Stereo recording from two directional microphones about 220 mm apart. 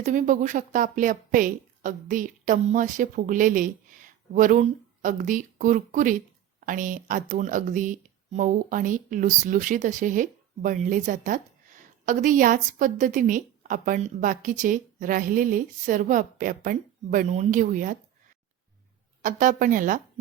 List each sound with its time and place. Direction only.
0.0 s speech: 35° right (ahead or behind)
19.2 s speech: 35° right (ahead or behind)